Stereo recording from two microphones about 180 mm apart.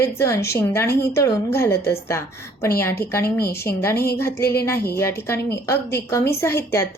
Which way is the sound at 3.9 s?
60° left (ahead or behind).